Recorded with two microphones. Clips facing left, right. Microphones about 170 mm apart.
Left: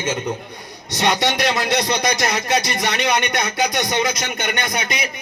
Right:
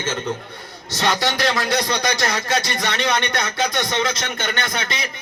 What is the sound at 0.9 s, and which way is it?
A man's voice, 20° left (ahead or behind).